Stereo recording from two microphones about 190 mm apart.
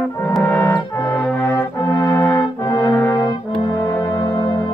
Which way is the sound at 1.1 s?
10° left (ahead or behind).